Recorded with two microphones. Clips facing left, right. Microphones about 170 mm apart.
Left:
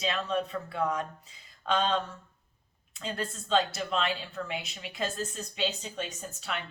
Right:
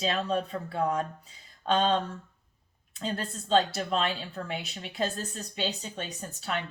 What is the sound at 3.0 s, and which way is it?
A woman's voice, 35° right (ahead or behind).